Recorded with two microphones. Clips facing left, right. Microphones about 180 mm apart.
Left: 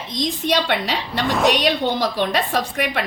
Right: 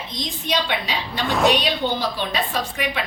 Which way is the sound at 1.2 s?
Centre (ahead or behind).